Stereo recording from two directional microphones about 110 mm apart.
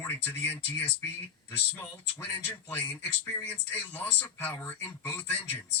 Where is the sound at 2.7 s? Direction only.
15° left (ahead or behind).